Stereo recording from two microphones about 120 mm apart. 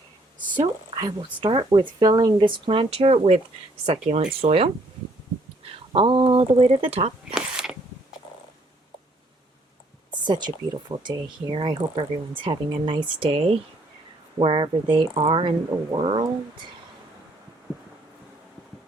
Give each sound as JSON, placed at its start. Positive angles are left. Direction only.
{"t": 0.9, "sound": "speech", "side_deg": -40}
{"t": 4.2, "sound": "speech", "side_deg": -50}
{"t": 5.9, "sound": "speech", "side_deg": -45}
{"t": 7.3, "sound": "a sound", "side_deg": -5}
{"t": 10.2, "sound": "speech", "side_deg": -40}